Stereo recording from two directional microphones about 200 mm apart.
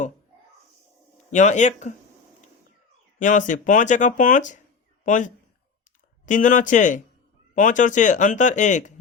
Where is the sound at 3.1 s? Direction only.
40° left (ahead or behind).